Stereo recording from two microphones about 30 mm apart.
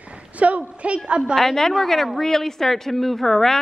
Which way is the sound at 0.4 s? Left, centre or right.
Right.